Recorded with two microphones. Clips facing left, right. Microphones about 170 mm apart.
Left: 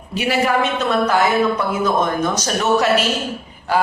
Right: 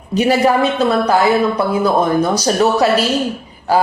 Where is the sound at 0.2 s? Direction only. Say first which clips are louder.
Right 5 dB; 40° right (ahead or behind).